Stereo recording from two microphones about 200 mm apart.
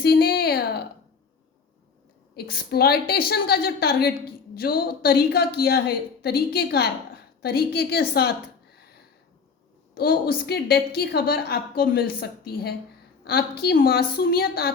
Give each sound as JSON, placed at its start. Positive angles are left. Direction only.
{"t": 0.0, "sound": "a sound", "side_deg": 50}
{"t": 2.3, "sound": "a woman's voice", "side_deg": 50}
{"t": 9.9, "sound": "a woman's voice", "side_deg": 50}